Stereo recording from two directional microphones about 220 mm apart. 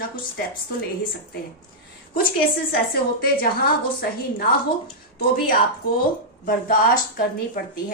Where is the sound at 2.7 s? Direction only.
45° left (ahead or behind).